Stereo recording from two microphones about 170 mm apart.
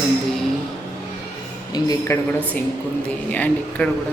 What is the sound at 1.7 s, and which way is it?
Speech, 20° left (ahead or behind).